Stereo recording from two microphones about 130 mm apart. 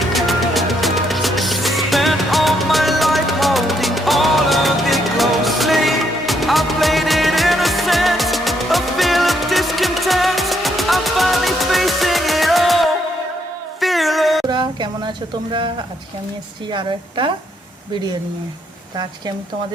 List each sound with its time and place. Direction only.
0.1 s music: centre (ahead or behind)
14.4 s a sound: 35° right (ahead or behind)
16.7 s a woman's voice: 40° right (ahead or behind)